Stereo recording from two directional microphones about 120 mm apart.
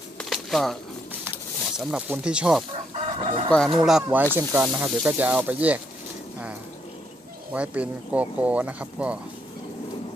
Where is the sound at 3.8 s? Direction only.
5° right (ahead or behind).